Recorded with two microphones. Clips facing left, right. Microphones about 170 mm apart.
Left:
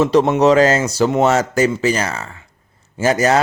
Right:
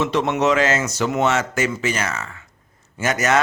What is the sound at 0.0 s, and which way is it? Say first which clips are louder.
Speech: left 7 dB; 35° left (ahead or behind).